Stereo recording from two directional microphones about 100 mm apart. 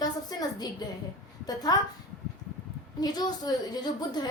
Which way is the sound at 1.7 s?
40° left (ahead or behind).